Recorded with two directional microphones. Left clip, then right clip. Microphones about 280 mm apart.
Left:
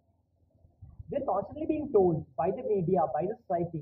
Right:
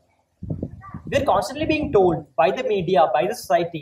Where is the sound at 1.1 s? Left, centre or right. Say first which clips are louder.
Right 11 dB; centre.